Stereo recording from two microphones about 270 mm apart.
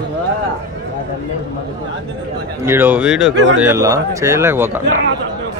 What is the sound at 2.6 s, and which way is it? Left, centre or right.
A man's voice, centre.